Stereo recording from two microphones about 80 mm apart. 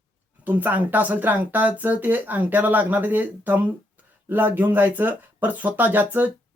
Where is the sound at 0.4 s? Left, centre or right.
Right.